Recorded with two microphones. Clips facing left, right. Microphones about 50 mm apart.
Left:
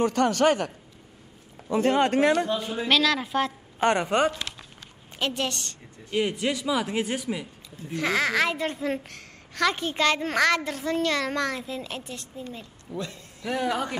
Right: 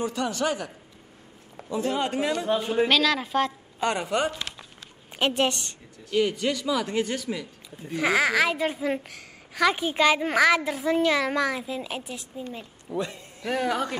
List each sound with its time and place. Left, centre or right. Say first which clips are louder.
0.0 s a man's voice: left 6 dB; left
1.7 s a man's voice: left 5 dB; left
2.4 s a man's voice: right 3 dB; right
2.9 s speech: even; centre
3.8 s a man's voice: left 3 dB; left
4.3 s a child's voice: left 1 dB; right
6.1 s a man's voice: right 2 dB; centre
7.7 s a child's voice: right 2 dB; centre
12.4 s a woman's voice: right 2 dB; right
13.4 s speech: right 1 dB; centre